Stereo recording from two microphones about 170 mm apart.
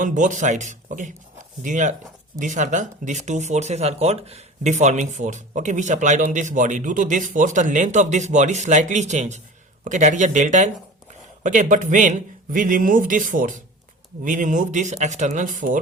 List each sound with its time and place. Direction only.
0.0 s speech: 45° right (ahead or behind)